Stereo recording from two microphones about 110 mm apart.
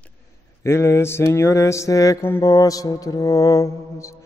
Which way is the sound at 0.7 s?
25° left (ahead or behind).